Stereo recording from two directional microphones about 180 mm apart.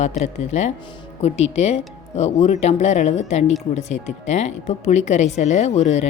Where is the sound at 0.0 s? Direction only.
40° left (ahead or behind).